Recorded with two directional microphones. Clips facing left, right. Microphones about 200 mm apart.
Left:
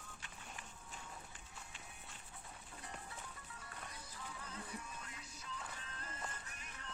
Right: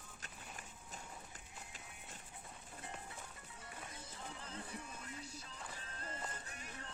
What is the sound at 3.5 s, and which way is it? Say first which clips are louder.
Music: right 3 dB; 25° right (ahead or behind).